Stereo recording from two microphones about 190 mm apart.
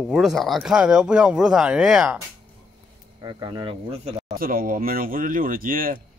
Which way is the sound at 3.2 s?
25° right (ahead or behind).